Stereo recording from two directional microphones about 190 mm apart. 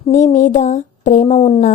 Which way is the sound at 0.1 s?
40° left (ahead or behind).